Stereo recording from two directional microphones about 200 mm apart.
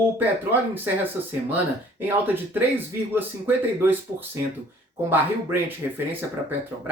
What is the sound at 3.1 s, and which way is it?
Speech, 10° right (ahead or behind).